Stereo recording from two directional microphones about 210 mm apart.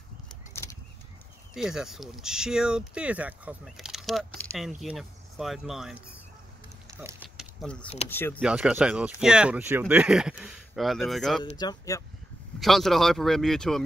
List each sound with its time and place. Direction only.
1.5 s speech: centre (ahead or behind)
7.0 s speech: 10° right (ahead or behind)
8.1 s speech: 10° left (ahead or behind)
8.4 s speech: 5° right (ahead or behind)
11.5 s speech: 15° left (ahead or behind)
12.5 s speech: centre (ahead or behind)